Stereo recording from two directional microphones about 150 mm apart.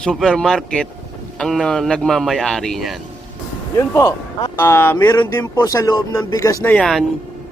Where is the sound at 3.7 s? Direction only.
20° left (ahead or behind).